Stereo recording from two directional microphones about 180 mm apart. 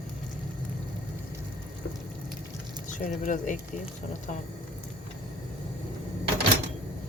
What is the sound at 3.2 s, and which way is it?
Speech, 45° left (ahead or behind).